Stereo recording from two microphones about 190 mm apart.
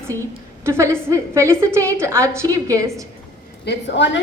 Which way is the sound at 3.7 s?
70° left (ahead or behind).